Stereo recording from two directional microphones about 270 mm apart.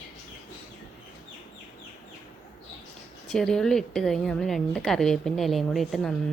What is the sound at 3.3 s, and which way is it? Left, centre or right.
A woman's voice, centre.